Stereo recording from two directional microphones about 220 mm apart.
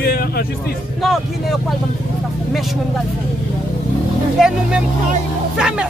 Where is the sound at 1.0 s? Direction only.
Centre (ahead or behind).